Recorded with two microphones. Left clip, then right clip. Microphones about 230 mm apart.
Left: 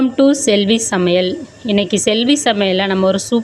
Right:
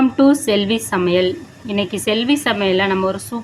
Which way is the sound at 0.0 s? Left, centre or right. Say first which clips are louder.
Left 1 dB; left.